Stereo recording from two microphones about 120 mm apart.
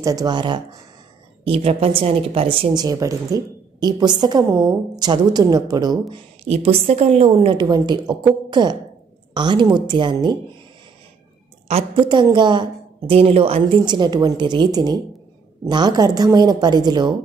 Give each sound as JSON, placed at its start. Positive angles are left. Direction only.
{"t": 0.0, "sound": "a woman's voice", "side_deg": -30}
{"t": 1.4, "sound": "speech", "side_deg": -55}
{"t": 2.7, "sound": "a woman's voice", "side_deg": -30}
{"t": 6.0, "sound": "a woman's voice", "side_deg": -55}
{"t": 7.6, "sound": "a woman's voice", "side_deg": -35}
{"t": 11.6, "sound": "a woman's voice", "side_deg": -60}
{"t": 12.0, "sound": "a woman's voice", "side_deg": -40}